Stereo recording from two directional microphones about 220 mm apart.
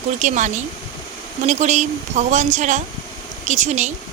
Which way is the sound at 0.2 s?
35° right (ahead or behind).